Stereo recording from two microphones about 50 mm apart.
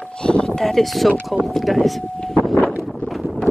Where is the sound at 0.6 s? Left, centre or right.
Centre.